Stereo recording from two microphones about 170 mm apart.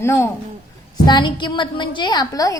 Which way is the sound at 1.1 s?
30° left (ahead or behind).